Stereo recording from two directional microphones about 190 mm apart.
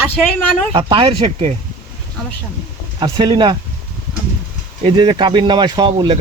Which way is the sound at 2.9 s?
25° right (ahead or behind).